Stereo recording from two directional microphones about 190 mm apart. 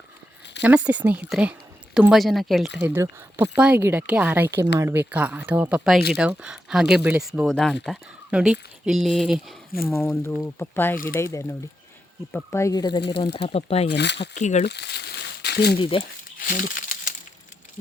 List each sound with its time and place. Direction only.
0.6 s a woman's voice: 10° right (ahead or behind)
9.9 s speech: 10° left (ahead or behind)
13.5 s speech: 35° left (ahead or behind)
13.9 s speech: 65° left (ahead or behind)
14.3 s speech: 40° left (ahead or behind)
14.7 s crumpling: 60° left (ahead or behind)
15.8 s speech: 25° left (ahead or behind)
16.4 s crumpling: 45° left (ahead or behind)